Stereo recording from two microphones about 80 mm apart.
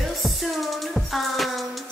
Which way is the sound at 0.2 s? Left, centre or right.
Centre.